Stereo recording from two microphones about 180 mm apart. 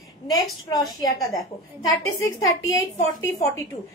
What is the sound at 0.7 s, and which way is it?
Speech, 20° left (ahead or behind).